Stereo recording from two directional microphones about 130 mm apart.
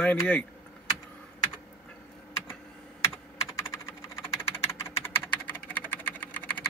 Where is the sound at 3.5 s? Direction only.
20° left (ahead or behind).